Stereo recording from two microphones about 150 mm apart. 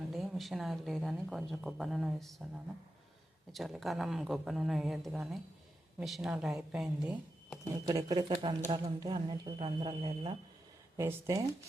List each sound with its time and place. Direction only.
0.1 s speech: centre (ahead or behind)
3.5 s speech: centre (ahead or behind)
7.7 s speech: 25° right (ahead or behind)
10.9 s speech: 20° right (ahead or behind)